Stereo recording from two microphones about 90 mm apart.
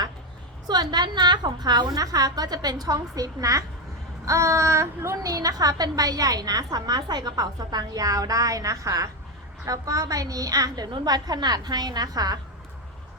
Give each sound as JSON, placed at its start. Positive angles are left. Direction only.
{"t": 0.7, "sound": "a woman's voice", "side_deg": -50}